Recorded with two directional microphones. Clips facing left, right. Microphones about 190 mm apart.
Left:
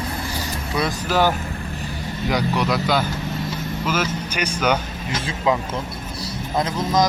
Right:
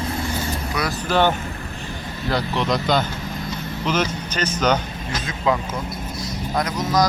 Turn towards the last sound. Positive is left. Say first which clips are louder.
# left 1 dB
turn(degrees=25)  # may be behind; listen again after turning